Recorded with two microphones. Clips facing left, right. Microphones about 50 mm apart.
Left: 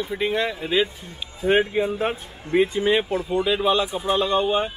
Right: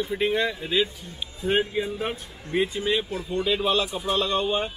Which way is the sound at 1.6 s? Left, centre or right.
Left.